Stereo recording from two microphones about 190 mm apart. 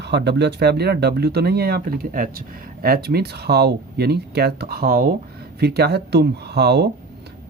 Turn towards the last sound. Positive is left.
turn(degrees=-60)  # may be behind; listen again after turning